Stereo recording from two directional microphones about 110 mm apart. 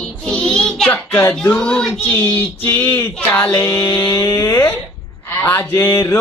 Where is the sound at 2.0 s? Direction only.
20° left (ahead or behind).